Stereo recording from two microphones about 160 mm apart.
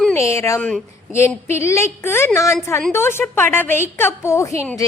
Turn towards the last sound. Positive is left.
turn(degrees=20)  # may be behind; listen again after turning